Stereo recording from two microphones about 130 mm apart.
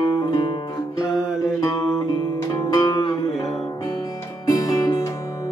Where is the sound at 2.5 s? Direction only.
30° left (ahead or behind).